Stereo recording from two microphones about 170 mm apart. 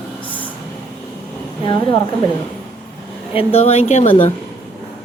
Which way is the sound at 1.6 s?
30° left (ahead or behind).